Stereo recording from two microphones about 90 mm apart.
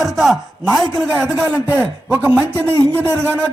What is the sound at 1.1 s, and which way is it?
Speech, 25° right (ahead or behind).